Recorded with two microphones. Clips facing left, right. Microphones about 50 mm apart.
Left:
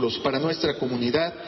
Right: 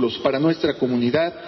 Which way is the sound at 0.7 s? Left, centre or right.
Centre.